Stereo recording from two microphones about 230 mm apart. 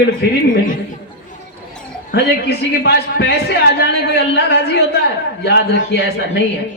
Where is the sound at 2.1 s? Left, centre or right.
Left.